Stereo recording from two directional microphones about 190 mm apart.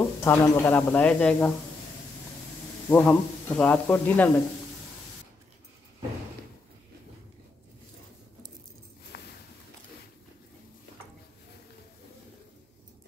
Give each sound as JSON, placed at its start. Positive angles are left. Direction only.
{"t": 0.2, "sound": "speech", "side_deg": 10}
{"t": 2.9, "sound": "speech", "side_deg": 10}
{"t": 9.1, "sound": "a sound", "side_deg": 60}